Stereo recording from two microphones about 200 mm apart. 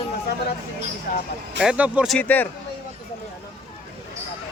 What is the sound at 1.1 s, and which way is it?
Speech, 50° left (ahead or behind).